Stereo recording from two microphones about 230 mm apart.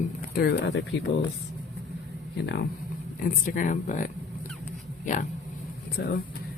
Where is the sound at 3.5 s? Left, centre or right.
Left.